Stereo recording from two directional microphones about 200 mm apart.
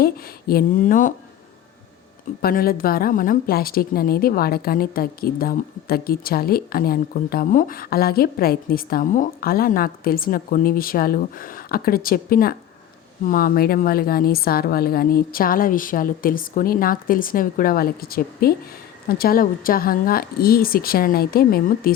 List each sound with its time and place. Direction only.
0.0 s a woman's voice: 50° left (ahead or behind)
2.4 s a woman's voice: 45° left (ahead or behind)